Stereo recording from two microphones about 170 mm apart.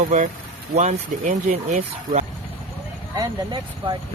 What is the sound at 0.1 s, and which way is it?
Speech, 45° right (ahead or behind).